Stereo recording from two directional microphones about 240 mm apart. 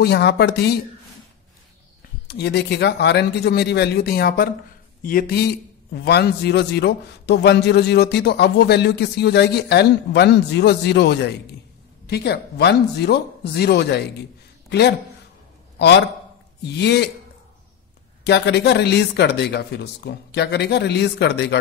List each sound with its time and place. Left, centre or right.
0.0 s a man's voice: left
2.2 s a man's voice: left
18.2 s a man's voice: left